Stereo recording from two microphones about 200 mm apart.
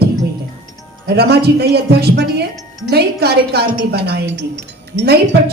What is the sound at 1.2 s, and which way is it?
A woman's voice, 55° right (ahead or behind).